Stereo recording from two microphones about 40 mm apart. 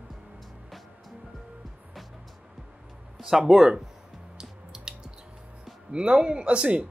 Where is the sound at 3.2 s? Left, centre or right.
Centre.